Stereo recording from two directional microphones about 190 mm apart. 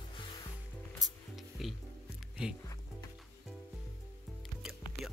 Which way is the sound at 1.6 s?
Centre (ahead or behind).